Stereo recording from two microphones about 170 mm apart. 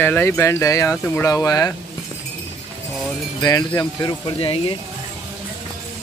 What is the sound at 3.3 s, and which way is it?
Speech, 20° left (ahead or behind).